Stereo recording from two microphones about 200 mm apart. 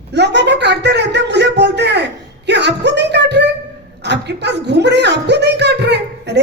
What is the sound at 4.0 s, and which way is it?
A woman's voice, 60° right (ahead or behind).